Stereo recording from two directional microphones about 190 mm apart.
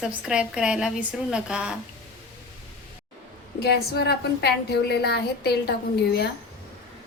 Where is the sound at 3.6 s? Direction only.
60° left (ahead or behind).